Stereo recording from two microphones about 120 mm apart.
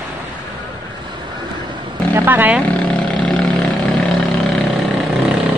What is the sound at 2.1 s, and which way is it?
Wild animals, 15° right (ahead or behind).